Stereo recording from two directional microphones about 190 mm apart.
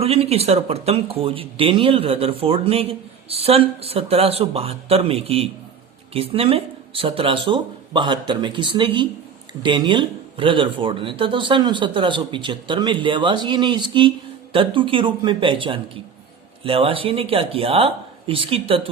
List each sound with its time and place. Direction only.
0.0 s speech: 30° right (ahead or behind)